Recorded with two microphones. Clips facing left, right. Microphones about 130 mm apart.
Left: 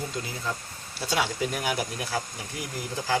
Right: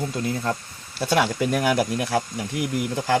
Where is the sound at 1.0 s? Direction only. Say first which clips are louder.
Right 6 dB; 60° right (ahead or behind).